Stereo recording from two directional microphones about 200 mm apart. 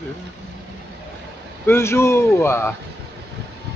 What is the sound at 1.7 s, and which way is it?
Speech, 15° left (ahead or behind).